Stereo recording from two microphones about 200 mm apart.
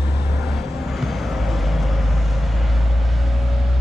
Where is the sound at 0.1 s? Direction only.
Centre (ahead or behind).